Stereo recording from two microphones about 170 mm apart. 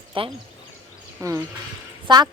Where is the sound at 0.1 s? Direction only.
30° right (ahead or behind).